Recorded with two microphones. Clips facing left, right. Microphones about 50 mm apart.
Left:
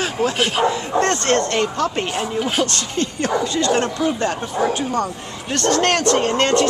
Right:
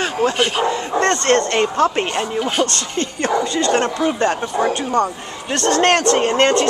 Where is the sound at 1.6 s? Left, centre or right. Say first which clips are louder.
Right 4 dB; right.